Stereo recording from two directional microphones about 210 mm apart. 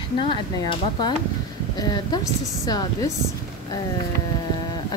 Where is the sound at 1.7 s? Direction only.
20° left (ahead or behind).